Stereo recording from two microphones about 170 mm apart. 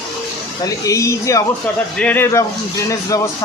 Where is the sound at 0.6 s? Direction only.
20° left (ahead or behind).